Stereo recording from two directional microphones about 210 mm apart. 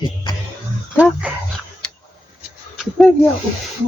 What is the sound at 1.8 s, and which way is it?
Tick, 5° left (ahead or behind).